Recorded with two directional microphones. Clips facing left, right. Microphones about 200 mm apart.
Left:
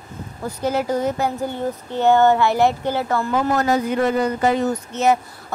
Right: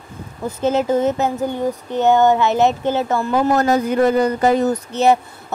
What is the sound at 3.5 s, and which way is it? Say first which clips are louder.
Speech: right 3 dB; 40° right (ahead or behind).